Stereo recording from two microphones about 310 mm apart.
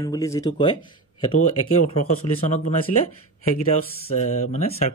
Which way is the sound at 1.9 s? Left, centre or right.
Left.